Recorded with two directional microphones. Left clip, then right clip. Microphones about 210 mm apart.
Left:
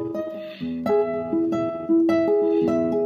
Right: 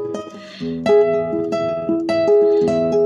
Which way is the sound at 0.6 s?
5° right (ahead or behind).